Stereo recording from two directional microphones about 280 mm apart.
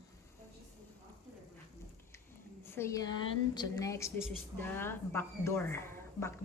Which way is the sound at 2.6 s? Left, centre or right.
Centre.